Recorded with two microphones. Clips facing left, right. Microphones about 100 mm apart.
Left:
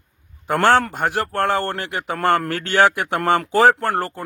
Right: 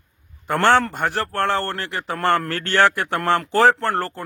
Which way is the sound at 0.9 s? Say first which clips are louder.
Left 1 dB; 5° left (ahead or behind).